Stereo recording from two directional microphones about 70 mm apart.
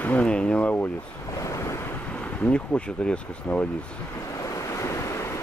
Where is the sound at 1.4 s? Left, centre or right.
Left.